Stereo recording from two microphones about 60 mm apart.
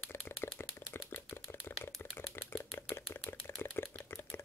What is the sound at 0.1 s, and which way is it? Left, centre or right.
Typewriter, left.